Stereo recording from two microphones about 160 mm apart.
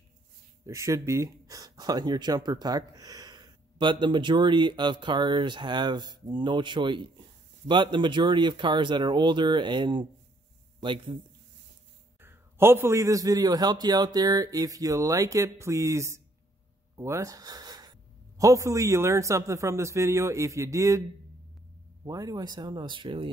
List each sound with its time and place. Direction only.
0.7 s a man's voice: 20° right (ahead or behind)
12.2 s speech: 15° right (ahead or behind)
22.0 s speech: 20° right (ahead or behind)